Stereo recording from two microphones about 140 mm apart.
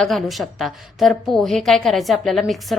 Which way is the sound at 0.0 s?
Centre (ahead or behind).